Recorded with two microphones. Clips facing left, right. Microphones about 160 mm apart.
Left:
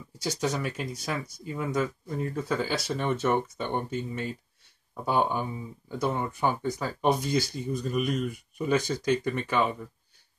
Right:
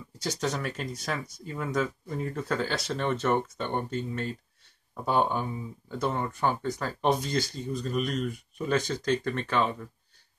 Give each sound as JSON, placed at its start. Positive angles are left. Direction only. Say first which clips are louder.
{"t": 0.2, "sound": "speech", "louder": "left 1 dB", "side_deg": 5}